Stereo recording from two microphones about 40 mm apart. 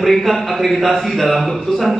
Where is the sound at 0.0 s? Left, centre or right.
Centre.